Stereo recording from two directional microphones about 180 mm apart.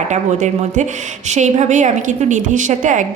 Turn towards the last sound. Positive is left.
turn(degrees=-45)  # may be behind; listen again after turning